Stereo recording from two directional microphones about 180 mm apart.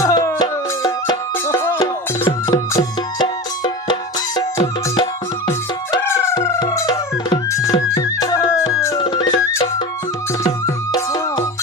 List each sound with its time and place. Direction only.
0.0 s music: 20° left (ahead or behind)
6.1 s music: 15° left (ahead or behind)
9.0 s music: 25° left (ahead or behind)
10.9 s music: 25° left (ahead or behind)